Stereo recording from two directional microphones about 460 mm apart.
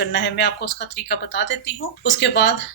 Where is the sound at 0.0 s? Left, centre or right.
Left.